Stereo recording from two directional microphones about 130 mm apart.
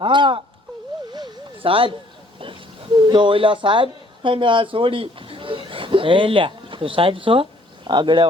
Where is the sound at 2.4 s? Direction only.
40° right (ahead or behind).